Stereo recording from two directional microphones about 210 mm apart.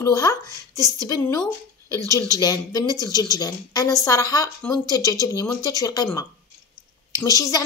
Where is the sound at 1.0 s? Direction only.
15° left (ahead or behind).